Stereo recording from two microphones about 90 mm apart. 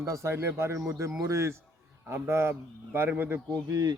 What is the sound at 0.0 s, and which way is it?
A man's voice, 35° right (ahead or behind).